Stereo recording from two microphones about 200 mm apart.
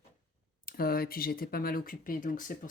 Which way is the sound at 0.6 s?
50° left (ahead or behind).